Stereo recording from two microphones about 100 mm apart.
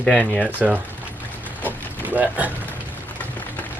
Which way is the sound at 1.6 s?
15° right (ahead or behind).